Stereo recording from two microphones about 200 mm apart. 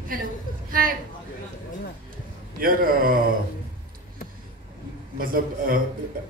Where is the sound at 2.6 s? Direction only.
45° right (ahead or behind).